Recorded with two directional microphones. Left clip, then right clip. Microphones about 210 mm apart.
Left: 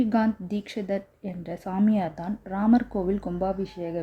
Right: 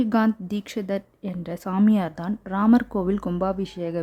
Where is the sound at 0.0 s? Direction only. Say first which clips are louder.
Right 2 dB; 15° right (ahead or behind).